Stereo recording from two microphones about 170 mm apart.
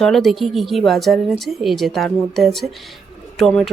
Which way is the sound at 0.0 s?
Centre (ahead or behind).